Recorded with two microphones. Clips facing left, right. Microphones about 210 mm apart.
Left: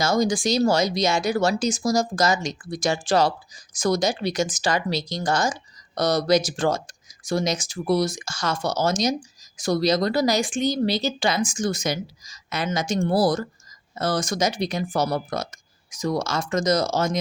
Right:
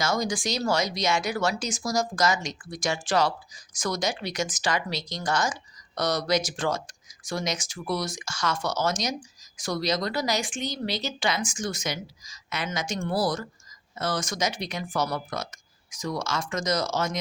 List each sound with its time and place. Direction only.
0.0 s speech: 30° left (ahead or behind)